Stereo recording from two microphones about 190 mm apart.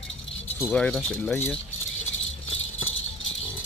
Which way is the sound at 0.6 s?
5° left (ahead or behind).